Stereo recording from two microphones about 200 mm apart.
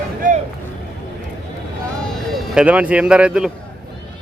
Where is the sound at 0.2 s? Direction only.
40° right (ahead or behind).